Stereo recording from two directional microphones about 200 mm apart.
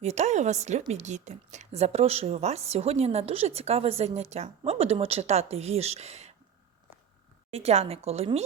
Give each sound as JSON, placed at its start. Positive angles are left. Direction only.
{"t": 0.0, "sound": "a woman's voice", "side_deg": -35}
{"t": 7.5, "sound": "a woman's voice", "side_deg": -30}